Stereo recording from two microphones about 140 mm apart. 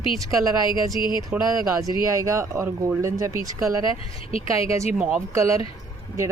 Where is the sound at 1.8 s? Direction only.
25° right (ahead or behind).